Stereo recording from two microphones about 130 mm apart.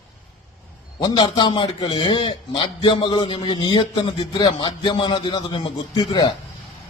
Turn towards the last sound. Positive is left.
turn(degrees=35)  # may be behind; listen again after turning